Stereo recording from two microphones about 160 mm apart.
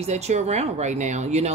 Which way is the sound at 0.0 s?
45° right (ahead or behind).